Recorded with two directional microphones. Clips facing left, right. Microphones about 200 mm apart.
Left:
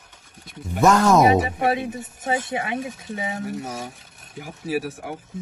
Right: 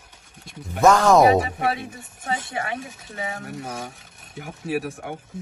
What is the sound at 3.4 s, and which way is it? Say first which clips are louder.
Speech: left 2 dB; centre (ahead or behind).